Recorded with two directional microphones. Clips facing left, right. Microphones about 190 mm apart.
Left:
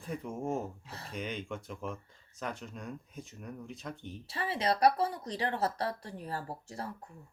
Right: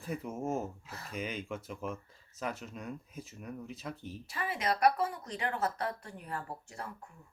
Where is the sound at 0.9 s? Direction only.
30° left (ahead or behind).